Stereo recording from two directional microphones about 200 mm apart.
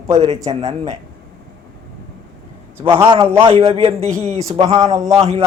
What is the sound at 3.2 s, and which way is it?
A man's voice, 25° right (ahead or behind).